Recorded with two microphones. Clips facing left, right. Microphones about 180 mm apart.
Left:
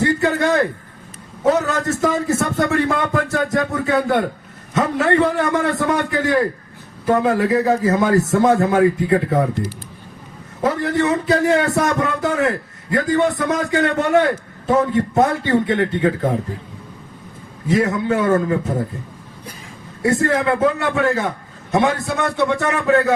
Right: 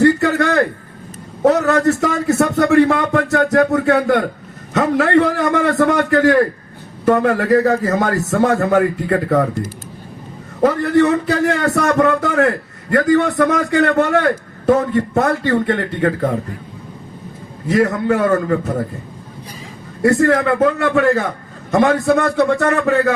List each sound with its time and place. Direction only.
0.0 s a sound: 70° right (ahead or behind)
1.4 s a man's voice: 70° right (ahead or behind)
10.6 s a man's voice: 65° right (ahead or behind)
17.7 s a man's voice: 70° right (ahead or behind)
20.0 s a man's voice: 70° right (ahead or behind)